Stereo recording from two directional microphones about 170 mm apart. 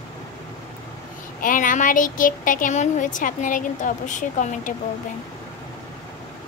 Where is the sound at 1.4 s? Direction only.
50° left (ahead or behind).